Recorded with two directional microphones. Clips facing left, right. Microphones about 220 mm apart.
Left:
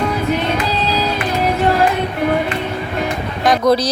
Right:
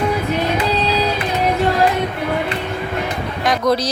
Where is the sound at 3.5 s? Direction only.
35° left (ahead or behind).